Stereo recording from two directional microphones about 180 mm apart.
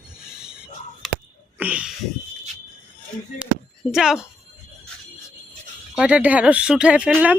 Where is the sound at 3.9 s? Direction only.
5° right (ahead or behind).